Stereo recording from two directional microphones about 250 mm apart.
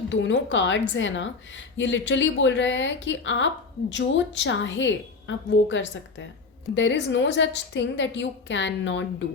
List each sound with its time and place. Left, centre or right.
0.1 s a woman's voice: left